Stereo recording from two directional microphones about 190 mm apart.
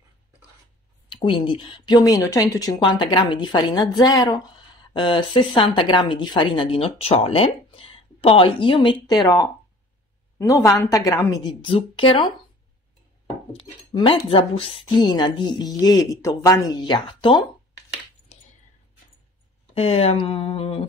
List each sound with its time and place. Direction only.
1.0 s a woman's voice: 25° left (ahead or behind)
10.4 s a woman's voice: 15° left (ahead or behind)
13.9 s a woman's voice: 25° left (ahead or behind)
18.3 s a sound: 35° left (ahead or behind)
19.7 s a woman's voice: 30° left (ahead or behind)